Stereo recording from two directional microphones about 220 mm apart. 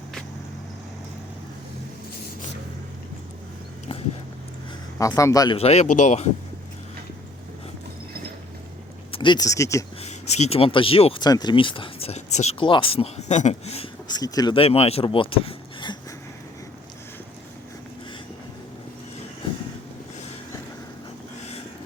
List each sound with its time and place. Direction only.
4.9 s speech: 15° left (ahead or behind)
5.5 s speech: 30° left (ahead or behind)
9.1 s speech: 20° left (ahead or behind)
10.0 s speech: 30° left (ahead or behind)